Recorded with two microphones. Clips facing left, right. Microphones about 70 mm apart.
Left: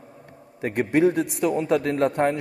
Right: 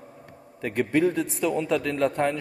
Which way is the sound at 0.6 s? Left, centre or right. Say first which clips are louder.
Left 3 dB; left.